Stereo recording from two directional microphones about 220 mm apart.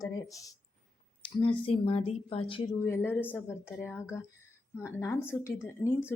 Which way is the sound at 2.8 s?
10° left (ahead or behind).